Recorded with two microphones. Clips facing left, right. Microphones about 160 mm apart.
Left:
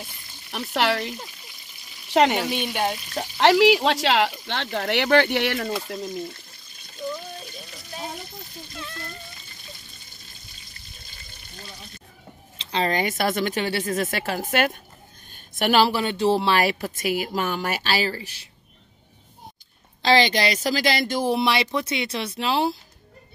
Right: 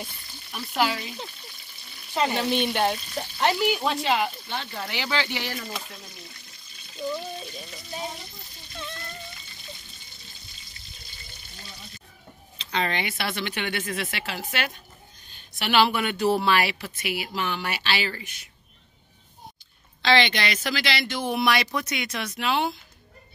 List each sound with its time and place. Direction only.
0.5 s speech: 70° left (ahead or behind)
2.3 s speech: 10° left (ahead or behind)
3.3 s speech: 90° left; by 5.7 s 70° left (ahead or behind)
7.3 s speech: centre (ahead or behind)
12.5 s a woman's voice: 30° left (ahead or behind)
16.5 s a woman's voice: 40° left (ahead or behind)
20.0 s a woman's voice: 40° left (ahead or behind)
21.4 s speech: 25° left (ahead or behind)